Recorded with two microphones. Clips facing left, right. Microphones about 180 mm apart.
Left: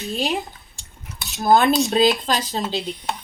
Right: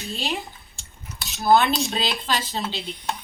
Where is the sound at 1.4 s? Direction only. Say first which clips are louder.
Left 3 dB; 45° left (ahead or behind).